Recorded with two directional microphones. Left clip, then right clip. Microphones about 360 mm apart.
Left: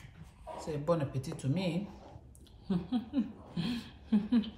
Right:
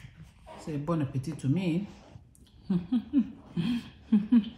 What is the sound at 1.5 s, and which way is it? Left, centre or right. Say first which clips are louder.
Speech: right 5 dB; left.